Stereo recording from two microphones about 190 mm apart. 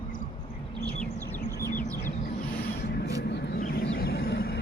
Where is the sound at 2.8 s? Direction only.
60° left (ahead or behind).